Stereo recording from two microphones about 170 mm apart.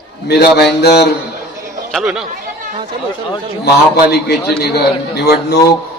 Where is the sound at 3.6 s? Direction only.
70° left (ahead or behind).